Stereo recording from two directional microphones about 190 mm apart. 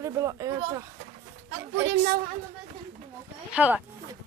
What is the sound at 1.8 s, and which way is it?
Speech, 65° right (ahead or behind).